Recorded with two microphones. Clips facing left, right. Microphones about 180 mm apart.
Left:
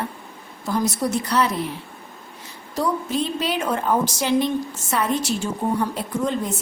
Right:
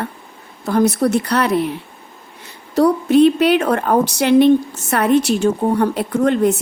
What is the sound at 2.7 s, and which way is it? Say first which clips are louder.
A woman's voice: right 11 dB; 65° right (ahead or behind).